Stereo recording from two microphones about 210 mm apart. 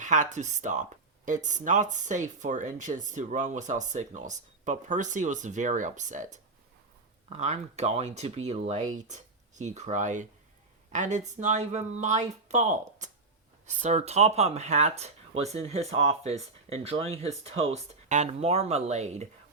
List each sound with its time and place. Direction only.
0.0 s speech: 35° right (ahead or behind)